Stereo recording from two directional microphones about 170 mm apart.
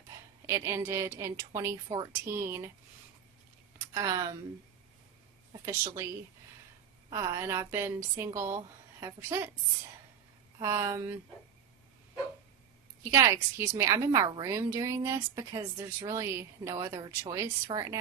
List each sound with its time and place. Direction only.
0.4 s a woman's voice: 15° right (ahead or behind)
3.9 s speech: 20° right (ahead or behind)
5.6 s a woman's voice: 15° right (ahead or behind)
7.1 s a woman's voice: 20° right (ahead or behind)
10.6 s a woman's voice: 15° right (ahead or behind)
13.1 s a woman's voice: 15° right (ahead or behind)